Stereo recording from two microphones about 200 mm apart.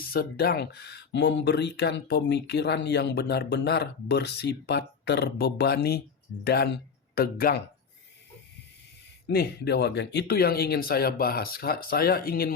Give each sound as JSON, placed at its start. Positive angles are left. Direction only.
{"t": 0.1, "sound": "speech", "side_deg": 50}
{"t": 9.2, "sound": "speech", "side_deg": 55}